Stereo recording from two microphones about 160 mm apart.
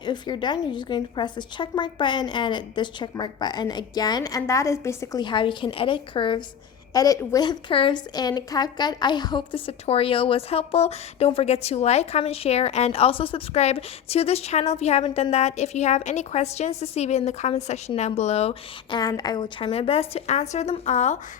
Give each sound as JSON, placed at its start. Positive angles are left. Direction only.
{"t": 0.0, "sound": "a woman's voice", "side_deg": 30}
{"t": 5.2, "sound": "a woman's voice", "side_deg": 30}
{"t": 18.9, "sound": "a woman's voice", "side_deg": 25}